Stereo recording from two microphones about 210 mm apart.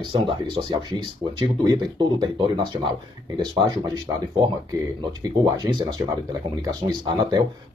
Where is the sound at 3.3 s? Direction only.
20° right (ahead or behind).